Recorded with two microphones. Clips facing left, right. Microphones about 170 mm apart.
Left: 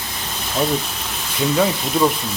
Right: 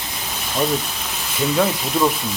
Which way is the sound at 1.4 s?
Centre (ahead or behind).